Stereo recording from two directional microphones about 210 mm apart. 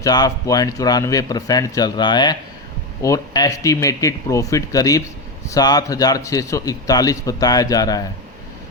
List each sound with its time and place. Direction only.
0.0 s a man's voice: 15° left (ahead or behind)